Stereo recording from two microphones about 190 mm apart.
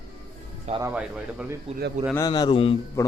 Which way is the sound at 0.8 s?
10° right (ahead or behind).